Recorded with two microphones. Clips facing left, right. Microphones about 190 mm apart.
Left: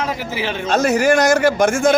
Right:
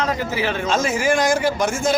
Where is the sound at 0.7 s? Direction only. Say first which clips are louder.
Left 6 dB; 65° left (ahead or behind).